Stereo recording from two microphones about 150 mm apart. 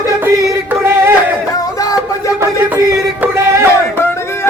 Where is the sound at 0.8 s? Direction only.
15° right (ahead or behind).